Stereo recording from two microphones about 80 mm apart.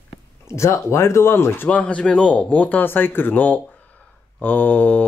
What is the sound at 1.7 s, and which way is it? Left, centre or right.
Speech, centre.